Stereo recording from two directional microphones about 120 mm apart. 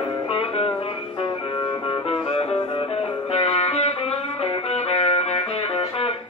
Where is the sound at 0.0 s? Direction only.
45° left (ahead or behind).